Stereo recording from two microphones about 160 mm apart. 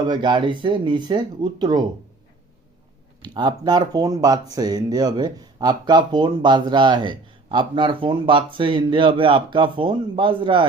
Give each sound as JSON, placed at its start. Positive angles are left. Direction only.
{"t": 0.1, "sound": "speech", "side_deg": -30}
{"t": 3.2, "sound": "speech", "side_deg": -25}